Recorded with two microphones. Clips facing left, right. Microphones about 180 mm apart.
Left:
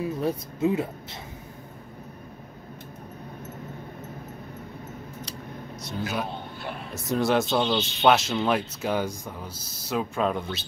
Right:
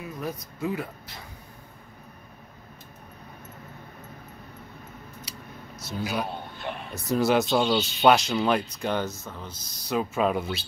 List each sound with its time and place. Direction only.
0.0 s speech: 30° left (ahead or behind)
5.8 s a man's voice: centre (ahead or behind)